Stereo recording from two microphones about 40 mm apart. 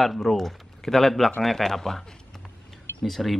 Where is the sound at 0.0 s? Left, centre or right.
Centre.